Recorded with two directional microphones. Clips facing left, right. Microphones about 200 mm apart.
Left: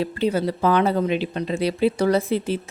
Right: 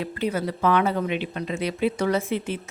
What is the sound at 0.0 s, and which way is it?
A woman's voice, 30° left (ahead or behind).